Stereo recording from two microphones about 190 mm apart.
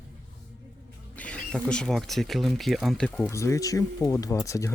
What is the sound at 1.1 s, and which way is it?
Speech, 5° left (ahead or behind).